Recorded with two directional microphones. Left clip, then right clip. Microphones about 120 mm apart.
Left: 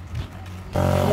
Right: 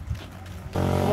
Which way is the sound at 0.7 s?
30° left (ahead or behind).